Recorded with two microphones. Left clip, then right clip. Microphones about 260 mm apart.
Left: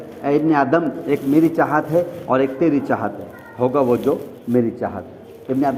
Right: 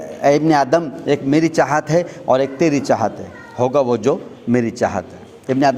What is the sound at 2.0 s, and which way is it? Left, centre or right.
A man's voice, right.